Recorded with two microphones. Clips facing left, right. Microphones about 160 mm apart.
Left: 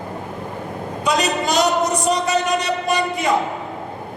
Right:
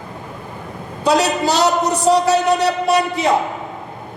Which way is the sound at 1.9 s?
70° right (ahead or behind).